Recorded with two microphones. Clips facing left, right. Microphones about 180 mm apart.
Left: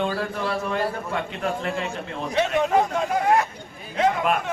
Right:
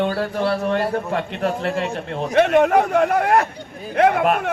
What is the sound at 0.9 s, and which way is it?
A man's voice, 40° right (ahead or behind).